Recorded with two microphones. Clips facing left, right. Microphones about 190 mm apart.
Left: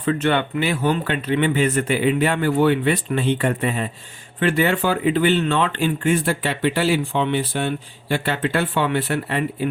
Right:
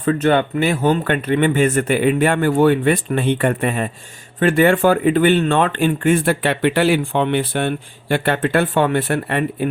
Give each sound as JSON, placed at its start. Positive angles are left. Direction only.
{"t": 0.0, "sound": "speech", "side_deg": -45}